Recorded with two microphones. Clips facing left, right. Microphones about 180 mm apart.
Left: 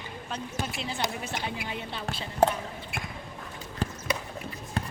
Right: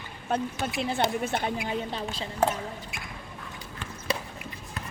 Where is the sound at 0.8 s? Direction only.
55° right (ahead or behind).